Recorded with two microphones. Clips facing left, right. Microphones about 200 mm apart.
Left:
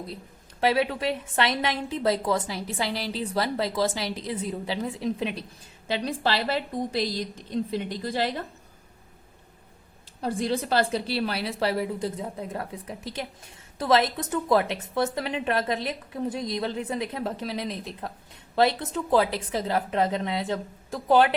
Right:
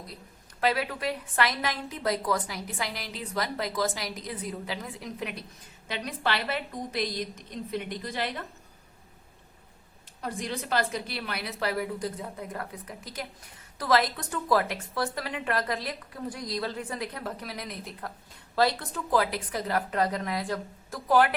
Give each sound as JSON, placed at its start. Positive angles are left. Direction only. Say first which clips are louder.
{"t": 0.6, "sound": "a woman's voice", "louder": "left 4 dB", "side_deg": 25}
{"t": 10.2, "sound": "a woman's voice", "louder": "left 7 dB", "side_deg": 30}